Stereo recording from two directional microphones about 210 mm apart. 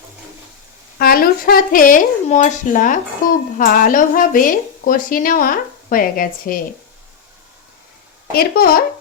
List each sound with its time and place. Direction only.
0.9 s a woman's voice: 45° left (ahead or behind)
8.3 s speech: 45° left (ahead or behind)